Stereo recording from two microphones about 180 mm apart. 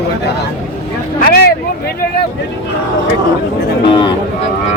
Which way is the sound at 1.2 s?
60° left (ahead or behind).